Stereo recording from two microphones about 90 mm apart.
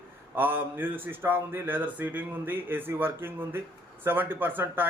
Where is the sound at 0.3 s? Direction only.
20° right (ahead or behind).